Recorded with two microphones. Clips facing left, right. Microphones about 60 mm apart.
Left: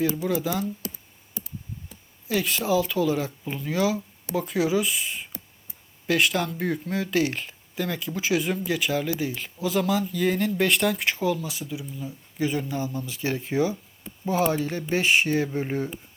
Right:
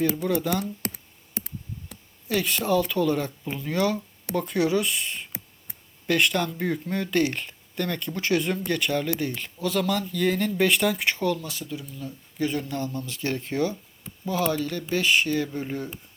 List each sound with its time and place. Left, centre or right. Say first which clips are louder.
0.0 s speech: even; centre
0.8 s clicking: right 3 dB; right
2.2 s speech: even; centre
14.3 s speech: left 2 dB; left